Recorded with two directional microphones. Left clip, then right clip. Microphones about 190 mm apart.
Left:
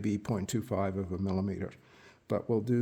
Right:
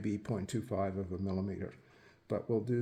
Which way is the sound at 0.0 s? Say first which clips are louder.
Left 4 dB; 50° left (ahead or behind).